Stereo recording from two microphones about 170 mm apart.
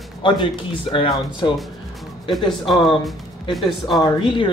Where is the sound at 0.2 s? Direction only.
30° left (ahead or behind).